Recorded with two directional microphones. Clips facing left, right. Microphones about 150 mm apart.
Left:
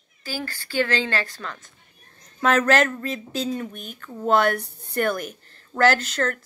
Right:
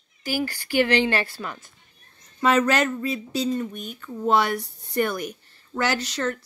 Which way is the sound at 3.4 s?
50° left (ahead or behind).